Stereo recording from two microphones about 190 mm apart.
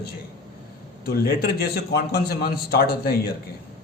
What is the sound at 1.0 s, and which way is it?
A man's voice, 55° left (ahead or behind).